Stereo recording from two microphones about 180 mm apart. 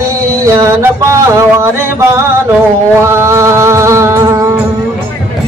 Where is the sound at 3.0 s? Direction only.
15° right (ahead or behind).